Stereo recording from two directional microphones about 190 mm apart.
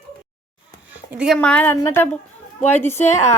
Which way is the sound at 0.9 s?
5° right (ahead or behind).